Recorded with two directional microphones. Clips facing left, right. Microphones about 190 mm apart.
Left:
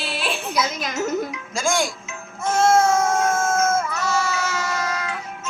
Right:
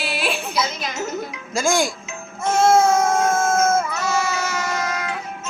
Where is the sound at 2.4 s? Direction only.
10° right (ahead or behind).